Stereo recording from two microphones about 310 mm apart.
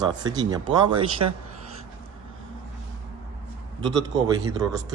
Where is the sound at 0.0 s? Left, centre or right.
Centre.